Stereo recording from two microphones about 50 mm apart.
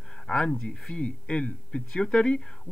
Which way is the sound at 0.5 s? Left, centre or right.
Centre.